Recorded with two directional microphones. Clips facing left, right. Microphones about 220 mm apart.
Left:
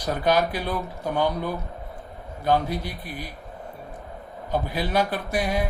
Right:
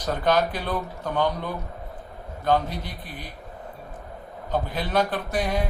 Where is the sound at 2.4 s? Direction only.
10° left (ahead or behind).